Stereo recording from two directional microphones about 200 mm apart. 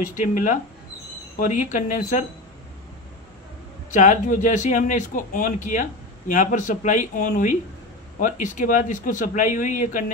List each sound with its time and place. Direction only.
0.0 s speech: 40° left (ahead or behind)
3.9 s speech: 40° left (ahead or behind)